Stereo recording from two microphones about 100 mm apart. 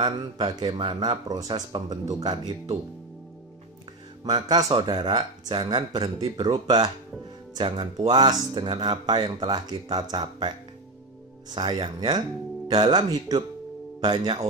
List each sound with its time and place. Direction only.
0.2 s speech: 45° right (ahead or behind)
0.7 s speech: 55° right (ahead or behind)
2.0 s speech: 40° right (ahead or behind)
4.2 s speech: 45° right (ahead or behind)
7.5 s speech: 60° right (ahead or behind)
8.1 s speech: 45° right (ahead or behind)
11.5 s speech: 50° right (ahead or behind)